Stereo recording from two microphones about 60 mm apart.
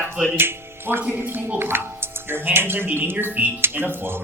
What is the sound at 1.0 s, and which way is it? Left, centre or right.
Speech, right.